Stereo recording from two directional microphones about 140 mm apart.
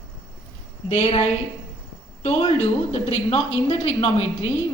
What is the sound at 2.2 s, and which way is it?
A woman's voice, 45° left (ahead or behind).